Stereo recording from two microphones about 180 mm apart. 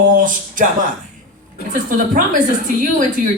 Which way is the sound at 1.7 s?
50° right (ahead or behind).